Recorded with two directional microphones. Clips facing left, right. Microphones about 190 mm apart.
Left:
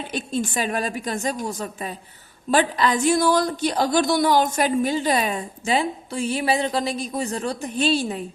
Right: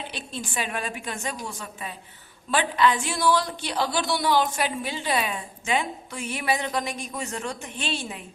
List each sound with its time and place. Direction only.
0.1 s a woman's voice: 45° left (ahead or behind)